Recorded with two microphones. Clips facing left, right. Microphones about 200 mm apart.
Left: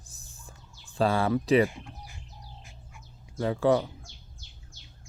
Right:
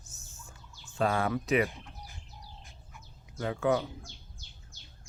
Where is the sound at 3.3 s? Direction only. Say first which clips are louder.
Left 5 dB; 30° left (ahead or behind).